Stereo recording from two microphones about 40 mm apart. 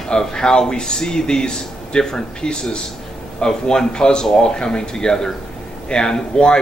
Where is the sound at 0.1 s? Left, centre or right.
Centre.